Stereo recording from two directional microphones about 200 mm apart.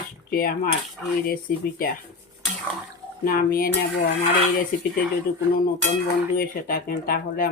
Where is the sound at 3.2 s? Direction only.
45° left (ahead or behind).